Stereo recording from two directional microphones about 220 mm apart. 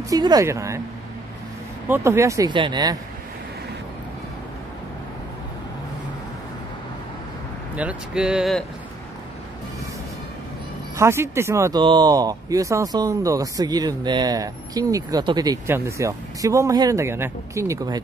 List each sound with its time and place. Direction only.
0.1 s speech: 15° right (ahead or behind)
1.9 s speech: 10° right (ahead or behind)
7.7 s speech: 5° right (ahead or behind)
11.0 s speech: 10° right (ahead or behind)